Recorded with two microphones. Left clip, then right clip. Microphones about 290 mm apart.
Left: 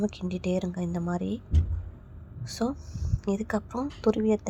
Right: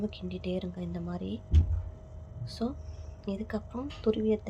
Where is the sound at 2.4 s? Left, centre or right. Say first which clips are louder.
Left 5 dB; centre.